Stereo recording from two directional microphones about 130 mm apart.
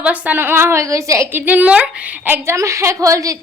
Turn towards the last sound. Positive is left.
turn(degrees=-25)  # may be behind; listen again after turning